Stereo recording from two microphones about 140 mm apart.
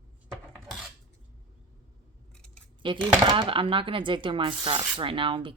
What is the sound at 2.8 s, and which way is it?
Speech, 35° right (ahead or behind).